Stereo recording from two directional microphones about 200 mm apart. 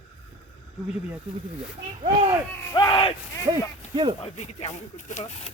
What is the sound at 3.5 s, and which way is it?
Speech, 20° right (ahead or behind).